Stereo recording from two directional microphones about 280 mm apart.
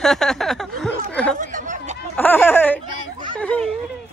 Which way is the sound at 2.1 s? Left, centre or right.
Centre.